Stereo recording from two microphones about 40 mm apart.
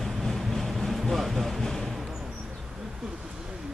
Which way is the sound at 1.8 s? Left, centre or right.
Centre.